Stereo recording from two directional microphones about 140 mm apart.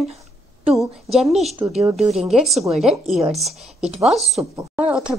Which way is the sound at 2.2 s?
5° right (ahead or behind).